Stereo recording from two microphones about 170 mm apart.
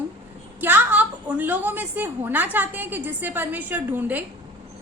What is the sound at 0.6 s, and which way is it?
A woman's voice, 10° right (ahead or behind).